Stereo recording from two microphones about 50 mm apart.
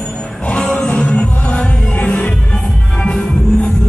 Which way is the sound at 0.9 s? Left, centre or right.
Left.